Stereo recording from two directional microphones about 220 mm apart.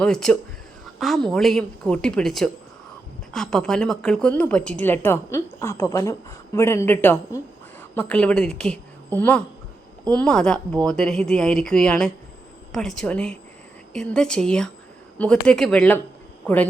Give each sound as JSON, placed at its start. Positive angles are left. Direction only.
{"t": 0.0, "sound": "a woman's voice", "side_deg": 0}